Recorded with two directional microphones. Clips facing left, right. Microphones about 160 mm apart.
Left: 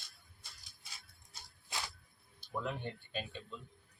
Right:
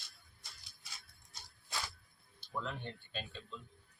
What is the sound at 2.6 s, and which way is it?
Speech, 10° left (ahead or behind).